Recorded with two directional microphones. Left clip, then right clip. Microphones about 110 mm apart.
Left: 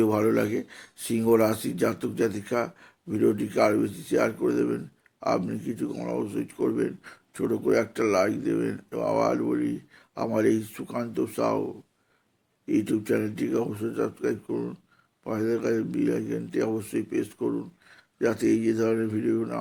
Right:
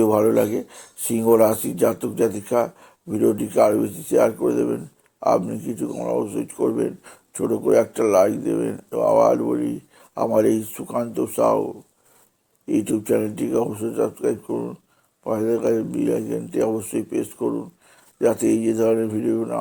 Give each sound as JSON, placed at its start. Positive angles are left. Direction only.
{"t": 0.0, "sound": "speech", "side_deg": -20}
{"t": 9.4, "sound": "speech", "side_deg": -15}
{"t": 12.6, "sound": "speech", "side_deg": -25}
{"t": 15.2, "sound": "speech", "side_deg": -25}